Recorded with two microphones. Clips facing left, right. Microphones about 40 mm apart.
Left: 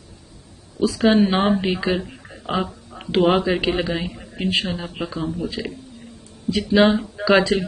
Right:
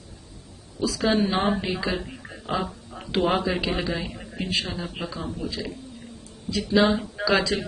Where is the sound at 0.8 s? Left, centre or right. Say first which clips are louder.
Left 6 dB; left.